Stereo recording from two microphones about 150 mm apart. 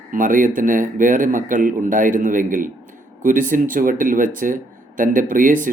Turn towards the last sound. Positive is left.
turn(degrees=-65)  # may be behind; listen again after turning